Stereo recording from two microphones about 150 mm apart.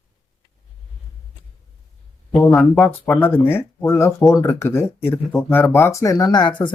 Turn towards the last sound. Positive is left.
turn(degrees=30)  # may be behind; listen again after turning